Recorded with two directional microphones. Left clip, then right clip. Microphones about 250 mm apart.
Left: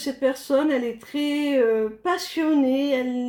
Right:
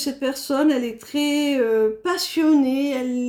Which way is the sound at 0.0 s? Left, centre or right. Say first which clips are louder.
Left 1 dB; right.